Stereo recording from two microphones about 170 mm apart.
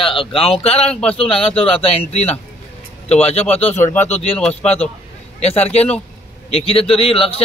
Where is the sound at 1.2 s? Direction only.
35° left (ahead or behind).